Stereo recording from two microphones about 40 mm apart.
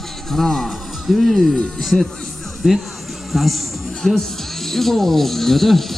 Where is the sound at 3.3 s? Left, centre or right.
Centre.